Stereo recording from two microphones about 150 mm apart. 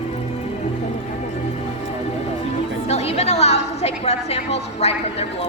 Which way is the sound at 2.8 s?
45° left (ahead or behind).